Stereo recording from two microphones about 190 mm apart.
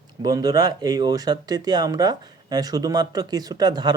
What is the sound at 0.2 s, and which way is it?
Speech, 20° right (ahead or behind).